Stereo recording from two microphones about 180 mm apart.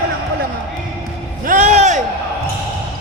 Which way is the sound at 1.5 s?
45° right (ahead or behind).